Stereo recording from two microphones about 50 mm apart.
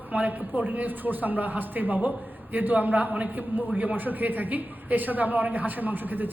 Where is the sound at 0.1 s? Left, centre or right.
Right.